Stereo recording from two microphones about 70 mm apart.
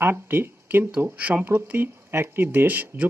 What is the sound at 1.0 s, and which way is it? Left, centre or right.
Speech, right.